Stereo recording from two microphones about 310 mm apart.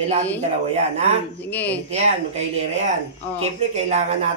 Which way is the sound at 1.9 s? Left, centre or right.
Right.